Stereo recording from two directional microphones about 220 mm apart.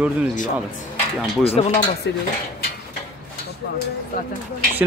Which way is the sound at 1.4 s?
25° left (ahead or behind).